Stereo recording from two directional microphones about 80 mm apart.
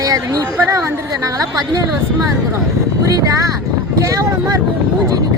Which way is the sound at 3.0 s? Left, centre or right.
Right.